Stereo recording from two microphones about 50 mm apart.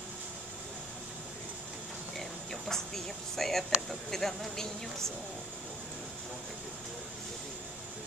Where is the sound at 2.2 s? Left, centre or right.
Centre.